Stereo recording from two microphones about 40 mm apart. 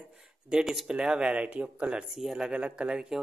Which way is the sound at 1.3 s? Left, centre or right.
Right.